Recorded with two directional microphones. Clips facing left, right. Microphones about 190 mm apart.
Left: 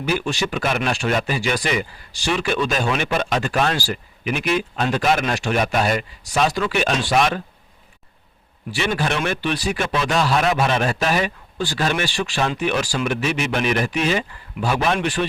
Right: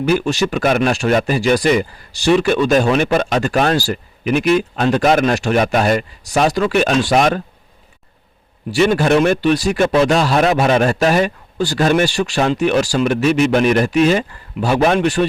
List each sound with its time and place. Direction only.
0.0 s speech: 45° right (ahead or behind)
8.7 s speech: 45° right (ahead or behind)